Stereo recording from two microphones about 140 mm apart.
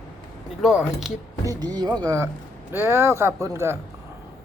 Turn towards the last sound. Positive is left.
turn(degrees=-20)  # may be behind; listen again after turning